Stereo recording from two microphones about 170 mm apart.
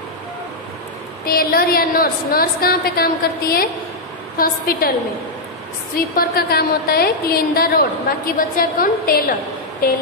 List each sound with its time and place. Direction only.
1.2 s a woman's voice: 60° left (ahead or behind)
5.9 s a woman's voice: 60° left (ahead or behind)